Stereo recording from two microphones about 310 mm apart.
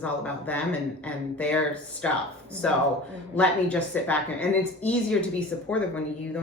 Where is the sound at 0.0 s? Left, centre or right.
Centre.